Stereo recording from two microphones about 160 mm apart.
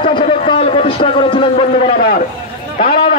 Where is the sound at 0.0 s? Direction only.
35° left (ahead or behind).